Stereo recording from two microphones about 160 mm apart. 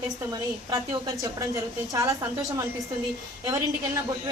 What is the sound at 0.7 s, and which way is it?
A woman's voice, 20° right (ahead or behind).